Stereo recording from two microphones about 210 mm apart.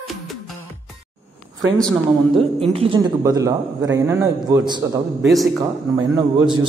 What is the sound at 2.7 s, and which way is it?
A man's voice, 25° right (ahead or behind).